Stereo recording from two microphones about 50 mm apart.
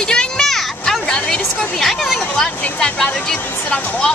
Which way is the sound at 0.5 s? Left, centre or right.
Centre.